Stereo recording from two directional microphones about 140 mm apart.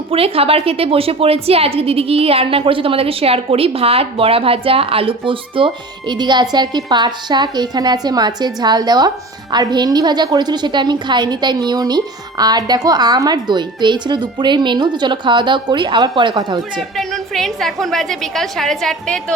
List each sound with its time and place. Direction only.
0.1 s a woman's voice: 45° right (ahead or behind)
17.0 s a woman's voice: centre (ahead or behind)